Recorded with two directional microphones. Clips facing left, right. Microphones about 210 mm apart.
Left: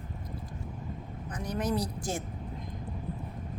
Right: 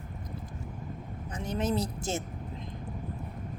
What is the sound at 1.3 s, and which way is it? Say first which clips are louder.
A woman's voice: right 1 dB; 25° right (ahead or behind).